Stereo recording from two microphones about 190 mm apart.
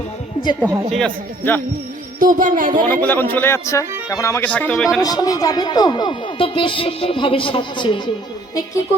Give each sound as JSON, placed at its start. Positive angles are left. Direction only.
{"t": 0.6, "sound": "a woman's voice", "side_deg": -15}
{"t": 0.9, "sound": "speech", "side_deg": 5}
{"t": 2.1, "sound": "speech", "side_deg": -45}
{"t": 2.9, "sound": "speech", "side_deg": 10}
{"t": 5.0, "sound": "speech", "side_deg": 20}